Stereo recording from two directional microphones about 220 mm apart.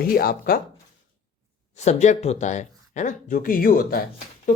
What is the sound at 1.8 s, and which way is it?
Speech, 30° left (ahead or behind).